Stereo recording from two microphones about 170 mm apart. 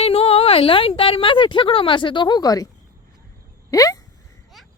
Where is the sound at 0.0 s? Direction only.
35° left (ahead or behind).